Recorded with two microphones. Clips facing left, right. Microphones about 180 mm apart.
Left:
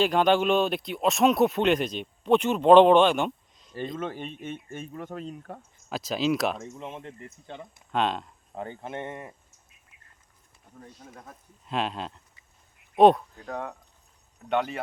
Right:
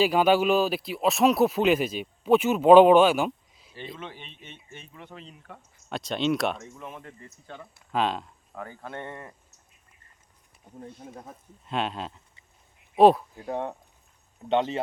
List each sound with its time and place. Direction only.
0.0 s speech: 5° right (ahead or behind)
3.8 s speech: 45° left (ahead or behind)
5.9 s speech: centre (ahead or behind)
6.6 s speech: 25° left (ahead or behind)
7.9 s speech: centre (ahead or behind)
8.5 s speech: 25° left (ahead or behind)
10.8 s speech: 25° right (ahead or behind)
11.6 s speech: centre (ahead or behind)
13.5 s speech: 25° right (ahead or behind)